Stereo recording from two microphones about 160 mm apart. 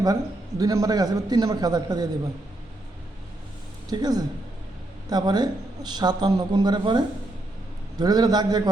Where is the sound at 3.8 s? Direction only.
25° right (ahead or behind).